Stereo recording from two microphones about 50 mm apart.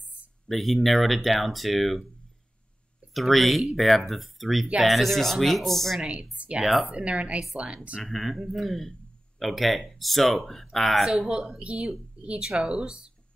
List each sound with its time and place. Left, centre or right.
0.5 s speech: centre
3.1 s speech: centre
5.9 s a woman's voice: right
6.3 s a sound: right
6.6 s speech: centre
6.9 s a woman's voice: right
8.0 s speech: centre
11.1 s a woman's voice: centre